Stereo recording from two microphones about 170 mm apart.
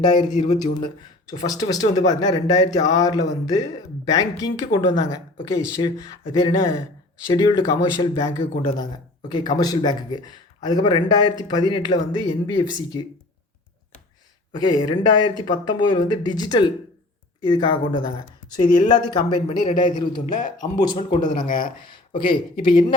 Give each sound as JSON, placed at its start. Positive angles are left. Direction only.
{"t": 0.0, "sound": "speech", "side_deg": 25}
{"t": 14.5, "sound": "speech", "side_deg": 25}
{"t": 21.3, "sound": "speech", "side_deg": 50}
{"t": 21.8, "sound": "speech", "side_deg": 30}